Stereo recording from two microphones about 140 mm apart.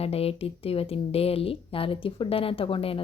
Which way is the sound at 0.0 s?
45° left (ahead or behind).